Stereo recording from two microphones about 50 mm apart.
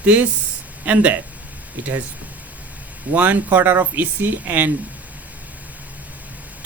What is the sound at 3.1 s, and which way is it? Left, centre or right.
Speech, right.